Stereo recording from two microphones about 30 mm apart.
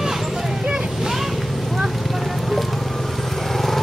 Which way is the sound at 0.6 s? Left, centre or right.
Right.